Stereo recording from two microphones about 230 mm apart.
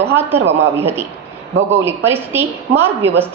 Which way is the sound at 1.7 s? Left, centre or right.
Centre.